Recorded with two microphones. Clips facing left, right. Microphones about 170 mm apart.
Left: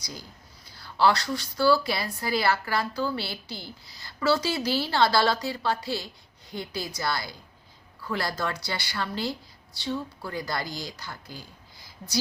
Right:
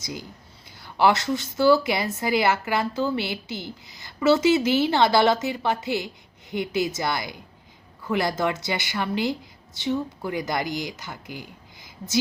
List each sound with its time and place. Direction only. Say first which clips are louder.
0.0 s a woman's voice: right 6 dB; 20° right (ahead or behind)